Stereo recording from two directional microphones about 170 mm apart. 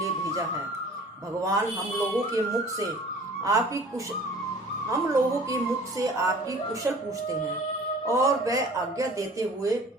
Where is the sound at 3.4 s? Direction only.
20° right (ahead or behind).